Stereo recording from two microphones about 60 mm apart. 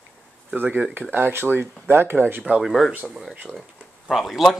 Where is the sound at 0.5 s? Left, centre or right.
Right.